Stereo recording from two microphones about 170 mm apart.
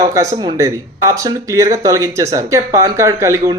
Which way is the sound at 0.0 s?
20° right (ahead or behind).